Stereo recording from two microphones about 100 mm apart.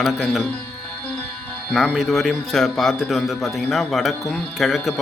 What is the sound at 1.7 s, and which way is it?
Speech, centre (ahead or behind).